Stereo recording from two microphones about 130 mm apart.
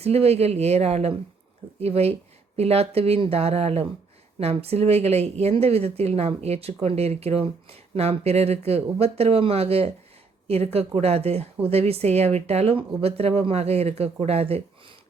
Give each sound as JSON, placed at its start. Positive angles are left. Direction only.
{"t": 0.0, "sound": "speech", "side_deg": -50}